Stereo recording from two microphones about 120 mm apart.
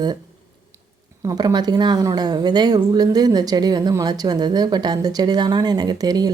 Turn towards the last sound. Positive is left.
turn(degrees=-35)  # may be behind; listen again after turning